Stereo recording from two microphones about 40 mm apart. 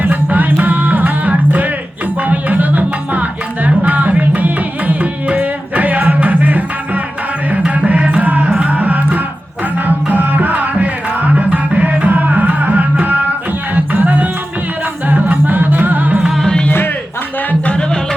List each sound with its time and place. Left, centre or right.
0.0 s music: right
7.5 s music: right
16.4 s music: centre